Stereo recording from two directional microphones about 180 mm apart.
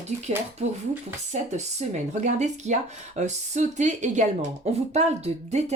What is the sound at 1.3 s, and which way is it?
Speech, 40° right (ahead or behind).